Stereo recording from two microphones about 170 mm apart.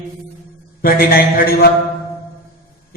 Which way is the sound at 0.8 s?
60° left (ahead or behind).